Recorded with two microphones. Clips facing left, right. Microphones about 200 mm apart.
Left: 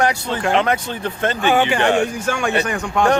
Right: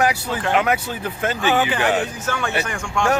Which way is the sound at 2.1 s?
10° left (ahead or behind).